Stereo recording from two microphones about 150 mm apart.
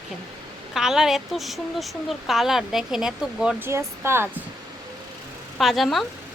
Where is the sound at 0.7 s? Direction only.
5° right (ahead or behind).